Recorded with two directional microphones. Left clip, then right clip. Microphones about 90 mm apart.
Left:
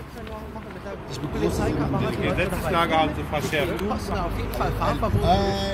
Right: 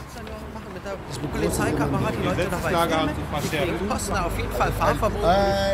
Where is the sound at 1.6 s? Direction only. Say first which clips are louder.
Right 1 dB; centre (ahead or behind).